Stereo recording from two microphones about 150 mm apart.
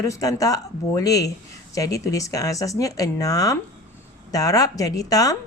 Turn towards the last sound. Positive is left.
turn(degrees=25)  # may be behind; listen again after turning